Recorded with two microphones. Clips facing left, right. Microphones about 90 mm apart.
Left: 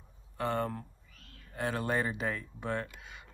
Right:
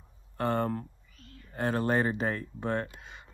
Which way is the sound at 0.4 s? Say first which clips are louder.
Right 4 dB; 45° right (ahead or behind).